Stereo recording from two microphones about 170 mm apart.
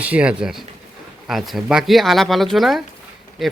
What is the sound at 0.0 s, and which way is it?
Speech, 10° right (ahead or behind).